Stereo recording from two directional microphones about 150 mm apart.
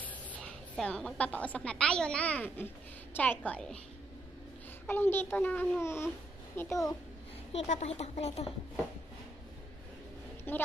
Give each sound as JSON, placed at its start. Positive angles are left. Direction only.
{"t": 0.0, "sound": "a woman's voice", "side_deg": 10}
{"t": 4.8, "sound": "a child's voice", "side_deg": 15}
{"t": 7.5, "sound": "speech", "side_deg": 50}
{"t": 10.5, "sound": "a child's voice", "side_deg": 15}